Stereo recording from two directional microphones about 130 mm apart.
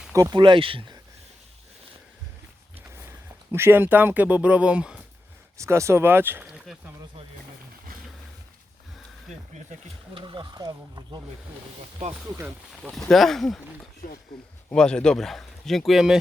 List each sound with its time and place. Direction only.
0.1 s speech: 25° right (ahead or behind)
0.4 s speech: 40° right (ahead or behind)
3.5 s speech: 20° right (ahead or behind)
5.5 s speech: 20° right (ahead or behind)
10.2 s speech: 40° right (ahead or behind)
12.8 s speech: centre (ahead or behind)
14.0 s speech: 90° left
14.7 s speech: 5° left (ahead or behind)